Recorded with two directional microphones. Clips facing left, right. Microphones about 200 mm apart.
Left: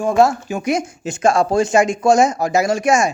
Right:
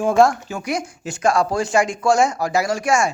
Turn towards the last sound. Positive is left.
turn(degrees=20)  # may be behind; listen again after turning